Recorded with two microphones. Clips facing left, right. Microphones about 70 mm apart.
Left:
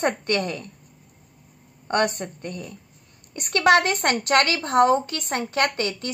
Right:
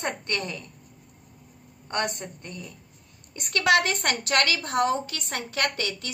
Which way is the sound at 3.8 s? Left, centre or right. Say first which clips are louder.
Left 4 dB; left.